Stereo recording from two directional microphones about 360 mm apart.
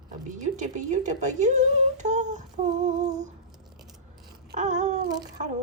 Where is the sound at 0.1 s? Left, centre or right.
Right.